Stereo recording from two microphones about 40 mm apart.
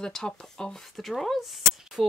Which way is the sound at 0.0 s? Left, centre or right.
Centre.